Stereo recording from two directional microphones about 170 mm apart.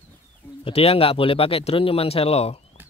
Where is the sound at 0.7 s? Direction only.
35° left (ahead or behind).